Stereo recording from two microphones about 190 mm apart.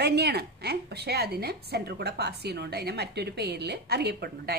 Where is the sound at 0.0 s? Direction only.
60° right (ahead or behind).